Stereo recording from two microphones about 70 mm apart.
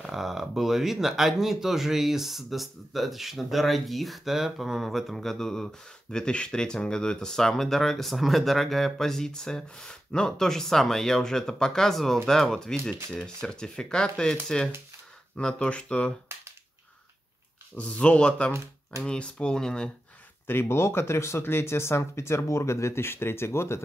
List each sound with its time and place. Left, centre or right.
0.0 s speech: centre
17.7 s speech: centre
20.4 s speech: left